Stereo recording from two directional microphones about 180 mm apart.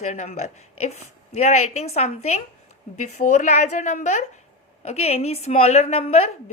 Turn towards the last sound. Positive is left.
turn(degrees=35)  # may be behind; listen again after turning